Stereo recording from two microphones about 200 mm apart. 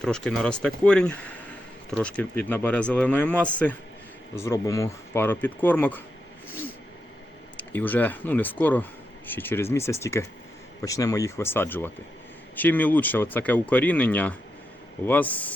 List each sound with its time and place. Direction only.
0.0 s speech: 5° left (ahead or behind)
7.5 s speech: 10° left (ahead or behind)